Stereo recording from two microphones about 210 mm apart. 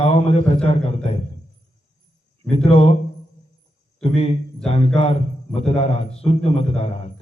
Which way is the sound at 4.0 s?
30° left (ahead or behind).